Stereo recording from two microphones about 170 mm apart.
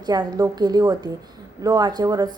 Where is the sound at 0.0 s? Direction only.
25° right (ahead or behind).